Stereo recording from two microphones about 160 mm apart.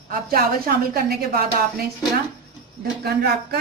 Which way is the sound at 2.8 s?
80° right.